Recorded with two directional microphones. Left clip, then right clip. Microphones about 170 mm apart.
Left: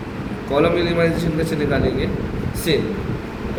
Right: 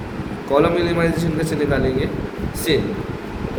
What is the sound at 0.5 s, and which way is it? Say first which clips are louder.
A man's voice: right 1 dB; 65° right (ahead or behind).